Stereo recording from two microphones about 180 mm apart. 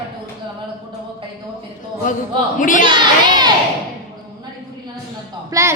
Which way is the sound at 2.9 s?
25° right (ahead or behind).